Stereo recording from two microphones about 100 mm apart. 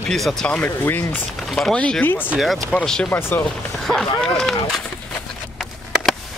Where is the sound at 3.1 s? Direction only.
20° left (ahead or behind).